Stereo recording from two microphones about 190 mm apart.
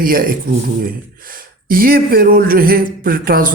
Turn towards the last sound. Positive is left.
turn(degrees=-50)  # may be behind; listen again after turning